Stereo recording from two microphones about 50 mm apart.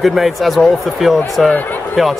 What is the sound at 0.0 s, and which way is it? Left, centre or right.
Speech, centre.